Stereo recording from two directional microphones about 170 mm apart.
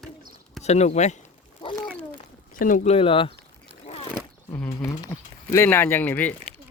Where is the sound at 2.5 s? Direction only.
50° left (ahead or behind).